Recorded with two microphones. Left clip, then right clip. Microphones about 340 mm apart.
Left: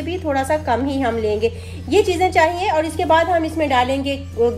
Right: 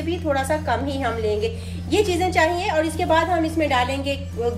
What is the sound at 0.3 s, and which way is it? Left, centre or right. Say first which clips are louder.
A woman's voice: left 4 dB; left.